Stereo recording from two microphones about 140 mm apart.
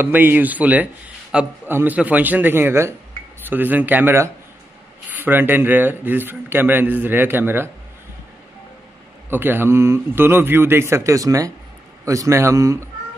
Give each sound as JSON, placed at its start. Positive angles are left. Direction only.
{"t": 0.0, "sound": "a man's voice", "side_deg": -15}
{"t": 9.3, "sound": "a man's voice", "side_deg": -15}